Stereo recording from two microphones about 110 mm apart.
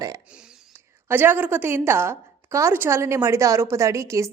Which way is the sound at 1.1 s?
20° right (ahead or behind).